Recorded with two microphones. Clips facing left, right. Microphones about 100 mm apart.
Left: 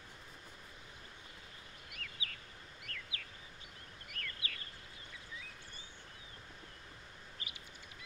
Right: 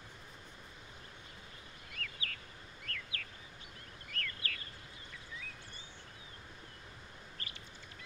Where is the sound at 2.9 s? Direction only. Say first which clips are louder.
Right 4 dB; 15° left (ahead or behind).